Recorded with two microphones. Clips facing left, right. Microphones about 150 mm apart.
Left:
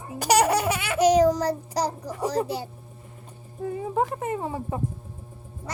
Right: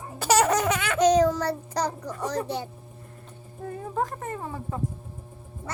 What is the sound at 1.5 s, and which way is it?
A child's voice, 10° left (ahead or behind).